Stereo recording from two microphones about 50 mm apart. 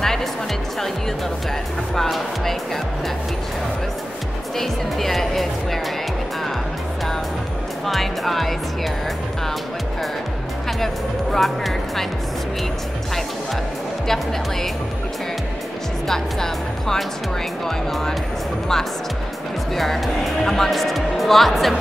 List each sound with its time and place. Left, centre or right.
0.0 s music: centre
2.0 s speech: centre
4.6 s music: centre
7.8 s speech: centre
11.3 s speech: centre
14.0 s speech: centre
16.1 s speech: centre
19.7 s speech: centre